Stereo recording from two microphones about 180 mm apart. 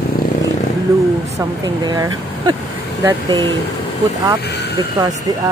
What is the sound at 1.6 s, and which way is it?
Speech, 20° right (ahead or behind).